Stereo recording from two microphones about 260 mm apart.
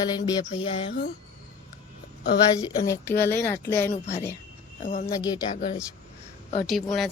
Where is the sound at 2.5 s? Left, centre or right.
Centre.